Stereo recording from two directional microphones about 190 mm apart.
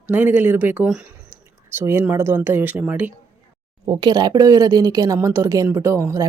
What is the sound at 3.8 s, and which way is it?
Speech, 20° right (ahead or behind).